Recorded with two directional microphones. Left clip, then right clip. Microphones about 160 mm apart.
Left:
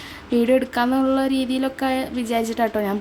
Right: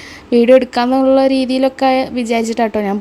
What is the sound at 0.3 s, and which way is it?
A woman's voice, 30° right (ahead or behind).